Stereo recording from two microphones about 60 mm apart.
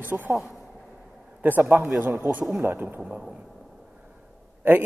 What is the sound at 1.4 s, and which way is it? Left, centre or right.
A man's voice, right.